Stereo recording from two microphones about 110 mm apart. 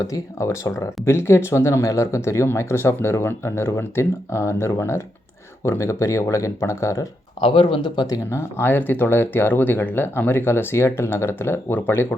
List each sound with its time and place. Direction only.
0.0 s speech: 30° left (ahead or behind)
7.4 s speech: 50° left (ahead or behind)
8.1 s speech: 25° left (ahead or behind)